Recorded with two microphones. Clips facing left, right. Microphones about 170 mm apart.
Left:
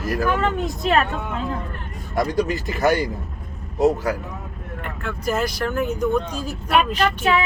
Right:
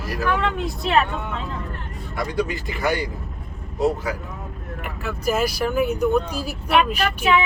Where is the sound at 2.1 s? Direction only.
40° left (ahead or behind).